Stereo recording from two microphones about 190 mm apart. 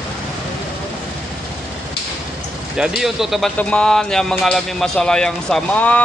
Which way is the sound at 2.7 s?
Centre (ahead or behind).